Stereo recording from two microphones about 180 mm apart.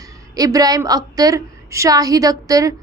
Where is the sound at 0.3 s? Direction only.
20° right (ahead or behind).